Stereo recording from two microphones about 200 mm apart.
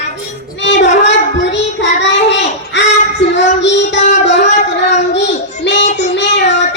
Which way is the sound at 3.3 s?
60° left (ahead or behind).